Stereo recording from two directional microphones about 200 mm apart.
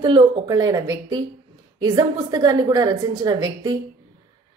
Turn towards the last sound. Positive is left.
turn(degrees=-20)  # may be behind; listen again after turning